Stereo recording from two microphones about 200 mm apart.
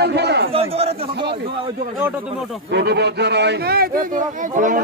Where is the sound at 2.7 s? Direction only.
55° right (ahead or behind).